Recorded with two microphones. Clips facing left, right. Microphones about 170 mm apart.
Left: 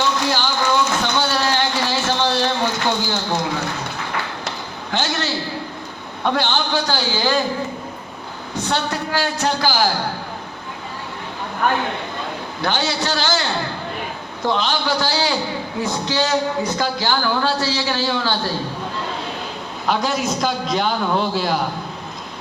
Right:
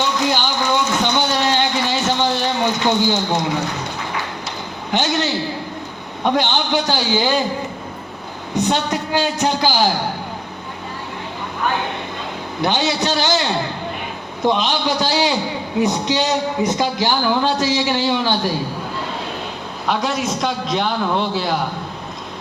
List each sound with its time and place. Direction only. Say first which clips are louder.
0.0 s a sound: right 1 dB; 20° right (ahead or behind)
4.9 s a man's voice: right 3 dB; 20° right (ahead or behind)
8.5 s a man's voice: right 4 dB; 20° right (ahead or behind)
12.6 s a man's voice: right 3 dB; 20° right (ahead or behind)
19.9 s a man's voice: even; centre (ahead or behind)